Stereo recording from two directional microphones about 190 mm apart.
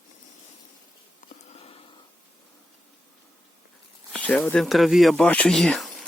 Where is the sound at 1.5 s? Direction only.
30° left (ahead or behind).